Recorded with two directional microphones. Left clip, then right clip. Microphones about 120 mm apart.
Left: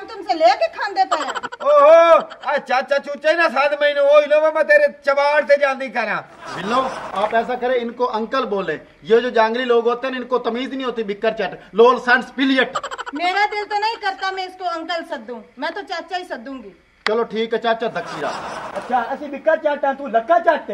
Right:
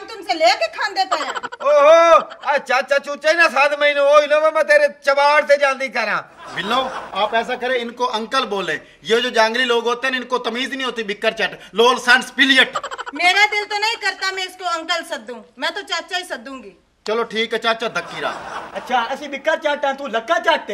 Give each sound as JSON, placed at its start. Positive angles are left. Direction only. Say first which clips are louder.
{"t": 0.3, "sound": "a man's voice", "louder": "left 1 dB", "side_deg": 0}
{"t": 12.7, "sound": "a man's voice", "louder": "right 1 dB", "side_deg": 0}
{"t": 19.4, "sound": "speech", "louder": "left 1 dB", "side_deg": -25}